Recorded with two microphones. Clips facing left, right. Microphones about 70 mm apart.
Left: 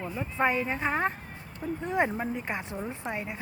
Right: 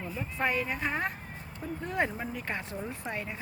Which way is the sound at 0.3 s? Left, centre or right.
Left.